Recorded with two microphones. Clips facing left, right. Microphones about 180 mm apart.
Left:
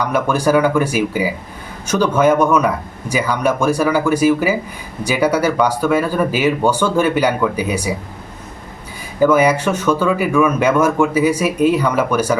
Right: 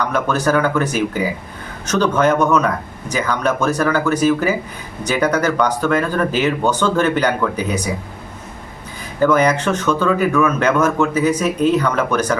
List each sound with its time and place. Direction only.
0.0 s speech: 10° left (ahead or behind)
9.2 s speech: 10° left (ahead or behind)